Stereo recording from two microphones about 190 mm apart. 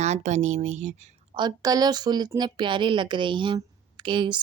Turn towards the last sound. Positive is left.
turn(degrees=-25)  # may be behind; listen again after turning